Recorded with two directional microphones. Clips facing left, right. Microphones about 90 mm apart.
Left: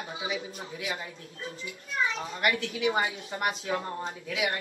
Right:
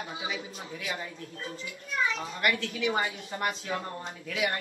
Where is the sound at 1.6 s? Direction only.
30° left (ahead or behind).